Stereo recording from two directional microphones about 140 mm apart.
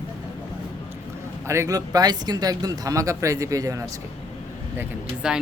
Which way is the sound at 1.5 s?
20° right (ahead or behind).